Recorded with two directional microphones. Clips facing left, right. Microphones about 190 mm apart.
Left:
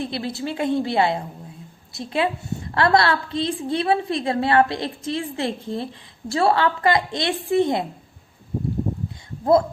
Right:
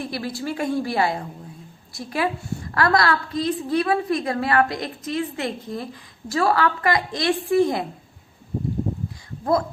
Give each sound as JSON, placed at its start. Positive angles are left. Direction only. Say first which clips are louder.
{"t": 0.0, "sound": "a woman's voice", "louder": "left 1 dB", "side_deg": 25}
{"t": 9.4, "sound": "speech", "louder": "left 4 dB", "side_deg": 25}